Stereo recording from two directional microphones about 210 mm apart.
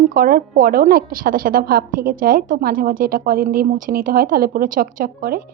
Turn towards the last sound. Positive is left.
turn(degrees=-45)  # may be behind; listen again after turning